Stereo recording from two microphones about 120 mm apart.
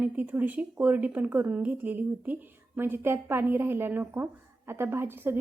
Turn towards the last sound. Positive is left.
turn(degrees=-20)  # may be behind; listen again after turning